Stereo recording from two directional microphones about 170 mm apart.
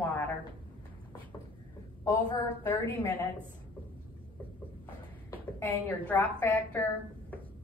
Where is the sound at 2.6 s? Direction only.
15° left (ahead or behind).